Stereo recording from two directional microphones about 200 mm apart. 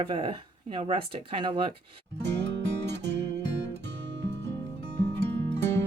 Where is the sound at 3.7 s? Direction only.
60° right (ahead or behind).